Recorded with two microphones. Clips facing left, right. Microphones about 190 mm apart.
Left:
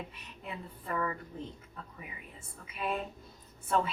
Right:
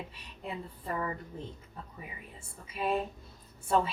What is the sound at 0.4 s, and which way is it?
Speech, 30° right (ahead or behind).